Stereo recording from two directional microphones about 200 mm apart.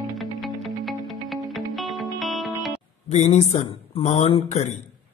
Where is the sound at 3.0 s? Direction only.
35° left (ahead or behind).